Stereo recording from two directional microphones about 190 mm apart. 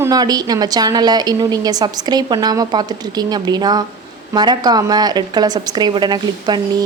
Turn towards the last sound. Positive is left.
turn(degrees=-20)  # may be behind; listen again after turning